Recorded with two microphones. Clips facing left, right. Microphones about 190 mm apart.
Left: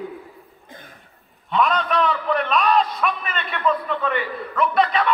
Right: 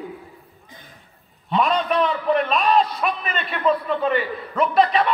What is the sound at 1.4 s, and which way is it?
A man's voice, 35° right (ahead or behind).